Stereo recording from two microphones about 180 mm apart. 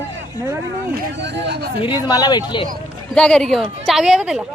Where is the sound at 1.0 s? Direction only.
75° right (ahead or behind).